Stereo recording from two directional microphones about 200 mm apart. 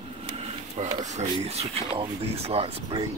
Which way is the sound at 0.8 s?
35° right (ahead or behind).